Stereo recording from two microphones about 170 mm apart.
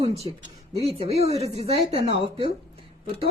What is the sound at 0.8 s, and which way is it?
Speech, 35° right (ahead or behind).